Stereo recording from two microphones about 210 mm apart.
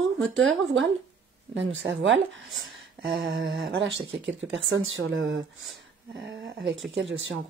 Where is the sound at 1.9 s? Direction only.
65° right (ahead or behind).